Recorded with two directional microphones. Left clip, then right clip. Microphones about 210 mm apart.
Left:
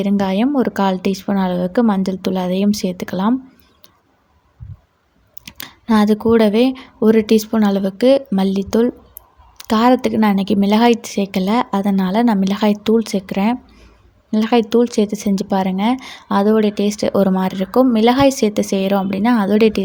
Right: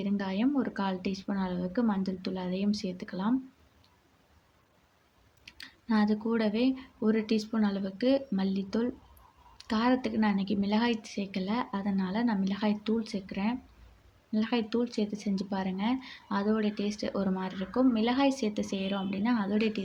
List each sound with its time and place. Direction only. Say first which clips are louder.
0.0 s speech: left 14 dB; 50° left (ahead or behind)
5.5 s speech: left 15 dB; 50° left (ahead or behind)